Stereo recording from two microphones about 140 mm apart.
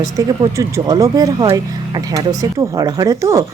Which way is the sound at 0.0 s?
25° right (ahead or behind).